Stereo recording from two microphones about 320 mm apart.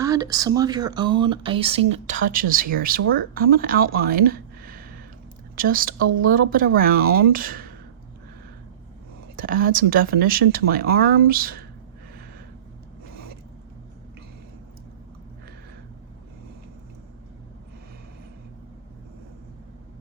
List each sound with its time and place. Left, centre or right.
0.0 s speech: centre; by 3.8 s right
3.9 s a sound: right
5.5 s speech: right
9.3 s speech: right